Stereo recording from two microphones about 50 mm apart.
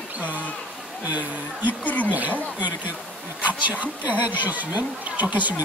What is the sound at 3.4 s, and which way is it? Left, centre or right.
Speech, right.